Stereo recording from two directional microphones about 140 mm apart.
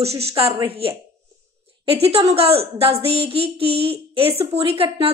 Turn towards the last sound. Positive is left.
turn(degrees=-40)  # may be behind; listen again after turning